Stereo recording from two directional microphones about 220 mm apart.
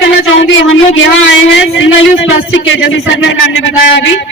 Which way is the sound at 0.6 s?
60° left (ahead or behind).